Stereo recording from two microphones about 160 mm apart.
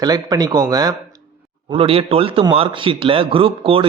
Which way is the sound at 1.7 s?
35° right (ahead or behind).